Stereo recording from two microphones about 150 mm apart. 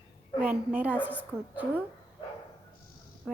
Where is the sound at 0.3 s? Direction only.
10° right (ahead or behind).